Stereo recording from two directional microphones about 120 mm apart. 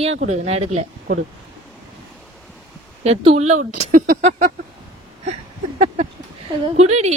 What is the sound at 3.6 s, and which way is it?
Speech, 90° right.